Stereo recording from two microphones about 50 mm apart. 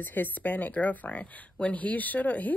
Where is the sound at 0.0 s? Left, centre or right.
Left.